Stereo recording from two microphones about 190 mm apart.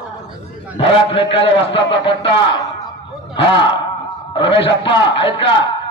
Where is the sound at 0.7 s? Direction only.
30° left (ahead or behind).